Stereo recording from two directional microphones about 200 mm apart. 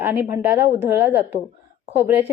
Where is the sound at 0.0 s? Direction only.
10° right (ahead or behind).